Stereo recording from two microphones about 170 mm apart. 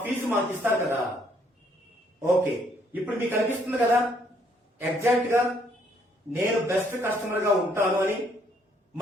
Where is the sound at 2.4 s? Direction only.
15° right (ahead or behind).